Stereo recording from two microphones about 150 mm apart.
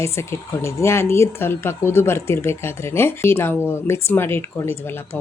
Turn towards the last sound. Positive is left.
turn(degrees=15)  # may be behind; listen again after turning